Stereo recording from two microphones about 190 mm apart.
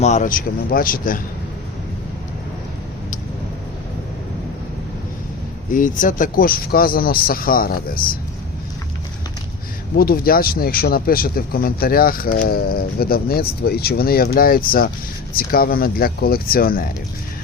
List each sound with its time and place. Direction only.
0.0 s speech: 40° left (ahead or behind)
5.7 s speech: 45° left (ahead or behind)
9.9 s speech: 50° left (ahead or behind)